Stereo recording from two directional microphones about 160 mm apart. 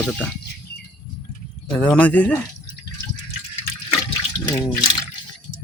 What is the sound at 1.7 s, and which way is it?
Speech, 10° left (ahead or behind).